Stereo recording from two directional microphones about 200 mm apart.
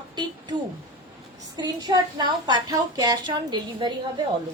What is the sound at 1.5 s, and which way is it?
Speech, 20° right (ahead or behind).